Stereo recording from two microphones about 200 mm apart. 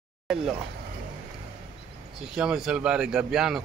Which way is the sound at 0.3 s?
Centre (ahead or behind).